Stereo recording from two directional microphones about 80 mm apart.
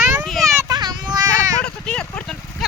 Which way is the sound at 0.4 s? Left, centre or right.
Right.